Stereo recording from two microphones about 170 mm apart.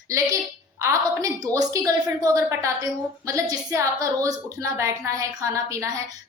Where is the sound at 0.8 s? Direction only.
20° right (ahead or behind).